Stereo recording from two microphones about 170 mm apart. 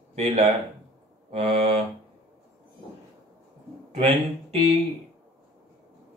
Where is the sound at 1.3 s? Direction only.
35° right (ahead or behind).